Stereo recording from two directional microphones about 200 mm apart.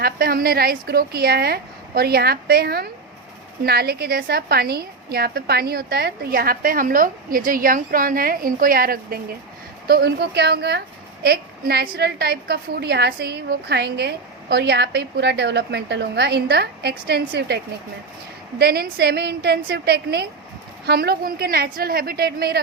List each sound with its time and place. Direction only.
0.0 s a woman's voice: 50° right (ahead or behind)
18.6 s a woman's voice: 55° right (ahead or behind)